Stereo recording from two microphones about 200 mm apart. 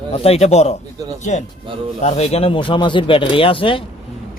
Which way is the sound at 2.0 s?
30° left (ahead or behind).